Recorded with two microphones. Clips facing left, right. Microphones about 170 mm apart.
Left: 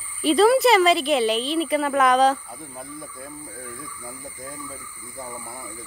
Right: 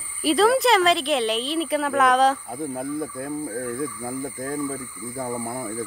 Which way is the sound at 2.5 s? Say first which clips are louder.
Right 10 dB; 55° right (ahead or behind).